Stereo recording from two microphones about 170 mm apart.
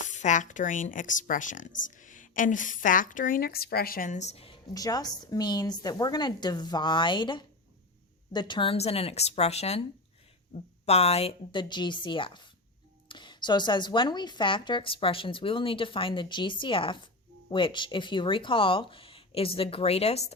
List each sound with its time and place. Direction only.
0.1 s speech: 45° left (ahead or behind)
4.7 s speech: 20° left (ahead or behind); by 20.3 s 40° left (ahead or behind)